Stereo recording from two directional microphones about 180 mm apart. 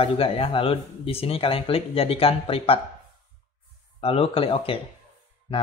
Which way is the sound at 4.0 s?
30° left (ahead or behind).